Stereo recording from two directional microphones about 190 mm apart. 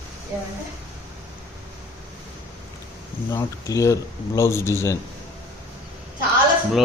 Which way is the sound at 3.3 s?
15° left (ahead or behind).